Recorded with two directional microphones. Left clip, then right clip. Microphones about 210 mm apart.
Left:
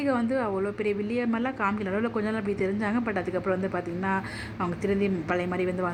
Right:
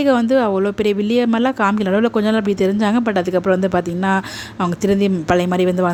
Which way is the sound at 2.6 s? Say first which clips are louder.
Right 11 dB; 50° right (ahead or behind).